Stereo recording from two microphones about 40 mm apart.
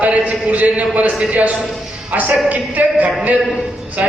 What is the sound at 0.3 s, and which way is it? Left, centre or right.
A man's voice, right.